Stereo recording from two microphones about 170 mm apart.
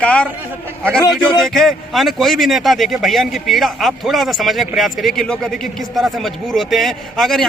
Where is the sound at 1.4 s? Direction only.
Centre (ahead or behind).